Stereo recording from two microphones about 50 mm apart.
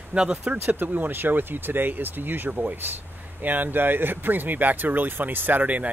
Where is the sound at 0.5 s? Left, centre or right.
Right.